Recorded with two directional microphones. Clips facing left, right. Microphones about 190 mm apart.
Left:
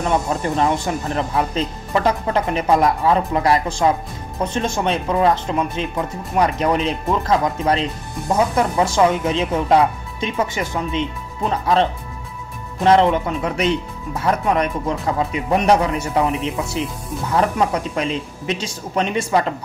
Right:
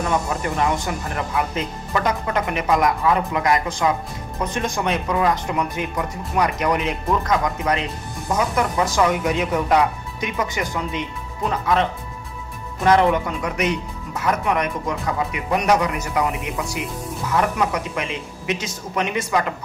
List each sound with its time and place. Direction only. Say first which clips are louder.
0.3 s speech: left 3 dB; 30° left (ahead or behind)